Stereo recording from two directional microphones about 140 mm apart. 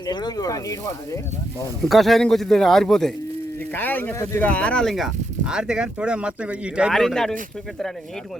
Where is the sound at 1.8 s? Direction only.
Centre (ahead or behind).